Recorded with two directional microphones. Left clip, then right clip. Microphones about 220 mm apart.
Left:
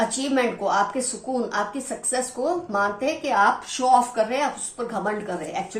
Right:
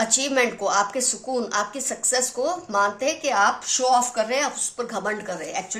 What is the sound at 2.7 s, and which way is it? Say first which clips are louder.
Speech: right 1 dB; 40° right (ahead or behind).